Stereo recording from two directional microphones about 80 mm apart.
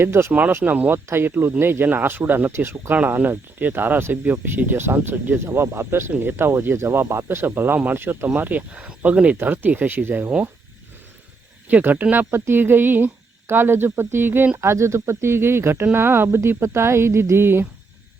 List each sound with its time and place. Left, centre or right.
0.0 s speech: right
0.6 s speech: right
0.9 s speech: right
2.9 s speech: right
11.7 s speech: right
14.6 s speech: right